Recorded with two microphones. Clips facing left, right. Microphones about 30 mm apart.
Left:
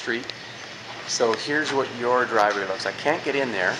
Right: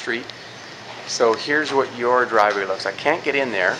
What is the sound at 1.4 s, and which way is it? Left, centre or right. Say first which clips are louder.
Speech: right 4 dB; centre.